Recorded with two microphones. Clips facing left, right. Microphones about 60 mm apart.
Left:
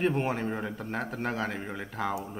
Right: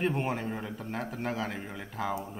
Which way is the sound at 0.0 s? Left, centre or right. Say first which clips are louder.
Left 2 dB; centre.